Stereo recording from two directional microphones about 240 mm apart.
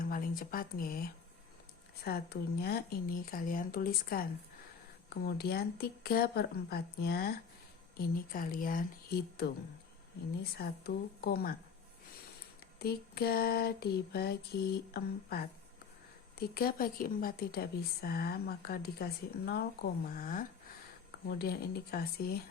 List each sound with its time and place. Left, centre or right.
0.0 s a woman's voice: left
10.6 s a woman's voice: left
12.8 s a woman's voice: left